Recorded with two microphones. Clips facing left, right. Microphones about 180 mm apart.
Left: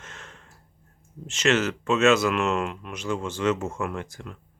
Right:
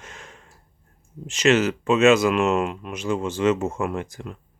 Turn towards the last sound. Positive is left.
turn(degrees=-20)  # may be behind; listen again after turning